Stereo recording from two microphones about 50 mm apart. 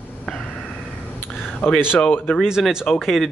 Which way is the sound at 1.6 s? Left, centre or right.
Left.